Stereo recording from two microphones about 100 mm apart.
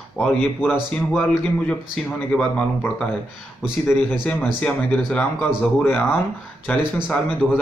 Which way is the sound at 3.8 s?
20° left (ahead or behind).